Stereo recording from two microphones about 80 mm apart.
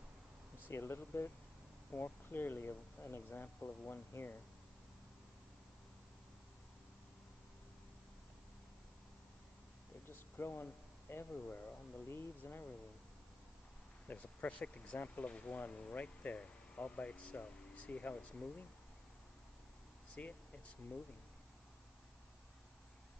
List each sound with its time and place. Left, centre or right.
0.7 s speech: left
10.0 s a sound: left
12.1 s speech: left
14.0 s speech: centre
20.2 s speech: centre